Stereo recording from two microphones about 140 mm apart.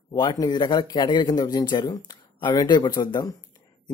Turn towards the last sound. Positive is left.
turn(degrees=30)  # may be behind; listen again after turning